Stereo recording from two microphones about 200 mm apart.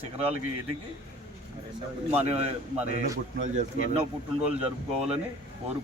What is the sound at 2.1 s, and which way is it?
A man's voice, 30° right (ahead or behind).